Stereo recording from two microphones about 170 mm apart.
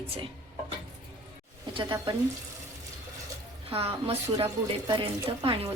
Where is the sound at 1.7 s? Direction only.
30° right (ahead or behind).